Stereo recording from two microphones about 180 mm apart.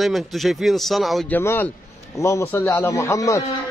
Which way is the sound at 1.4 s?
15° left (ahead or behind).